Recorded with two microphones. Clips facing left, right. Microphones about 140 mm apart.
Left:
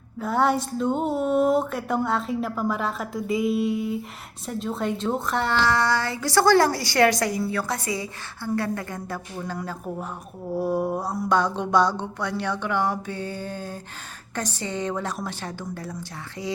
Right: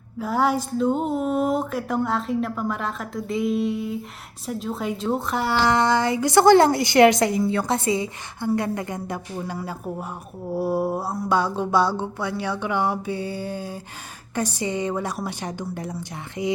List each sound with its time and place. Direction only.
0.2 s a woman's voice: 5° right (ahead or behind)
9.6 s mantra: 10° right (ahead or behind)
16.4 s a woman's voice: 20° right (ahead or behind)